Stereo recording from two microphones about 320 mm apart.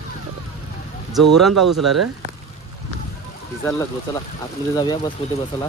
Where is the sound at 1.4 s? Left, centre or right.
Centre.